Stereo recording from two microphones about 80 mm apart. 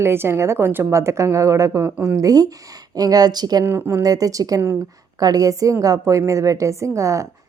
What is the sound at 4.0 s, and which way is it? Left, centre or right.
A woman's voice, right.